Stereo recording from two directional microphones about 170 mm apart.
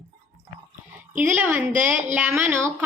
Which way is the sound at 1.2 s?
10° right (ahead or behind).